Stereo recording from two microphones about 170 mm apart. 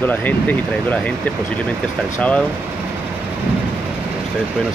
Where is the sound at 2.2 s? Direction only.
5° left (ahead or behind).